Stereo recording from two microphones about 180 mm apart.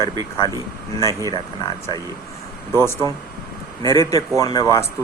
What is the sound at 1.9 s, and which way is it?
Speech, 20° left (ahead or behind).